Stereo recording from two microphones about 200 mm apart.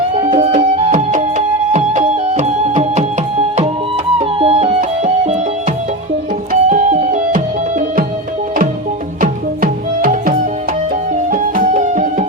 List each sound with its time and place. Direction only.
0.2 s music: 30° right (ahead or behind)
4.2 s music: 30° right (ahead or behind)
6.5 s music: 40° right (ahead or behind)
9.2 s music: 45° right (ahead or behind)